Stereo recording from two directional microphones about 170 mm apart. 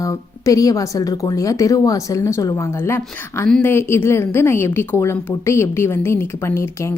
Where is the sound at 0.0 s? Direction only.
20° left (ahead or behind).